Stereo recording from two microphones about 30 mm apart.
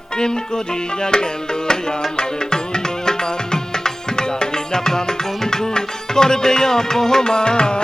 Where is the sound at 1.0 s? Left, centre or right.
Left.